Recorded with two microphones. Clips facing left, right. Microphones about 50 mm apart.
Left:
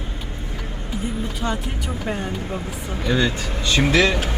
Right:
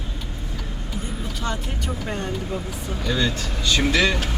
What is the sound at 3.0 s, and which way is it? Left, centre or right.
Speech, left.